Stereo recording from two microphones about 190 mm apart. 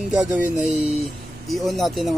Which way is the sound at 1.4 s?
Centre (ahead or behind).